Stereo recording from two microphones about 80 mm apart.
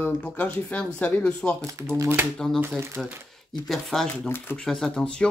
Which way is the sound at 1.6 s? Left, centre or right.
Right.